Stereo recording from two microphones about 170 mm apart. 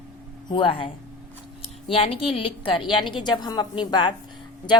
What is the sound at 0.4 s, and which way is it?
Speech, 30° left (ahead or behind).